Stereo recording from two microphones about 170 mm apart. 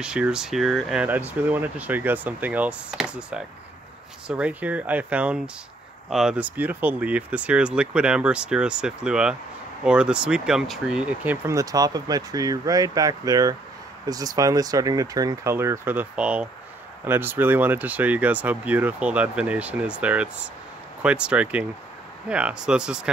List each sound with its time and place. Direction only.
0.0 s speech: 5° right (ahead or behind)